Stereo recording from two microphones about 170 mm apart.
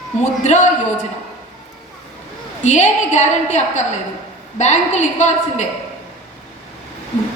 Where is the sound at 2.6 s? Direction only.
45° left (ahead or behind).